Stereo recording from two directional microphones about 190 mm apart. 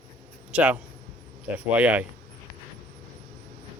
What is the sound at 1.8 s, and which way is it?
Speech, 10° right (ahead or behind).